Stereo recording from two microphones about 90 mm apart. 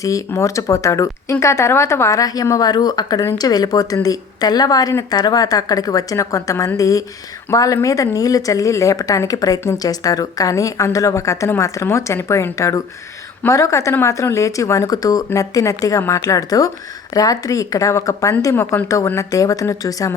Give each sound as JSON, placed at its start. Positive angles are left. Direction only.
{"t": 0.0, "sound": "a woman's voice", "side_deg": 40}
{"t": 18.5, "sound": "speech", "side_deg": 25}